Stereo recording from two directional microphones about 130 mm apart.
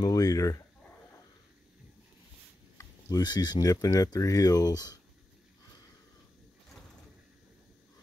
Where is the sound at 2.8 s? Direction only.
25° left (ahead or behind).